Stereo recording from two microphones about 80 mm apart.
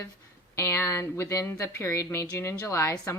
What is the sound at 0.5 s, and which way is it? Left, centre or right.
A woman's voice, left.